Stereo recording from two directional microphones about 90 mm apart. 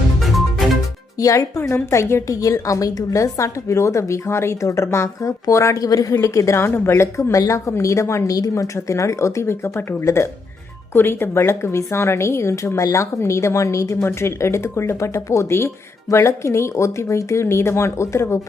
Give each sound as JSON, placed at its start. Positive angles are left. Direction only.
{"t": 0.2, "sound": "music", "side_deg": 0}
{"t": 1.2, "sound": "speech", "side_deg": 40}